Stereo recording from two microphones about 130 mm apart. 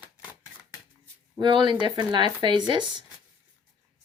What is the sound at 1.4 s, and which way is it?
Speech, 35° right (ahead or behind).